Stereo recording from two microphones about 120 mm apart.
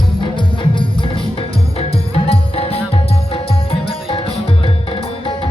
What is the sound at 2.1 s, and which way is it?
Music, 55° left (ahead or behind).